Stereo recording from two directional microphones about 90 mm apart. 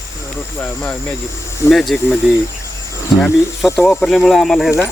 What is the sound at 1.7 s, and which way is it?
Speech, centre (ahead or behind).